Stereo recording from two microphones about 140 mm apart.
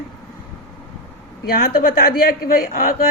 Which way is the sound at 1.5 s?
90° left.